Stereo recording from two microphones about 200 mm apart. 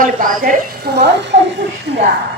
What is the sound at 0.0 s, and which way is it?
A woman's voice, 45° right (ahead or behind).